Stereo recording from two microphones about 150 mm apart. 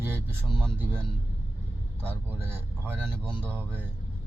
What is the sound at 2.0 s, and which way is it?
Speech, 15° right (ahead or behind).